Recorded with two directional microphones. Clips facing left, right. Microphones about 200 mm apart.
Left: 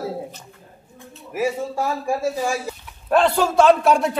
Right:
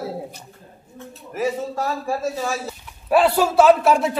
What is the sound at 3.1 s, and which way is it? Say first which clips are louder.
A man's voice: right 1 dB; 10° right (ahead or behind).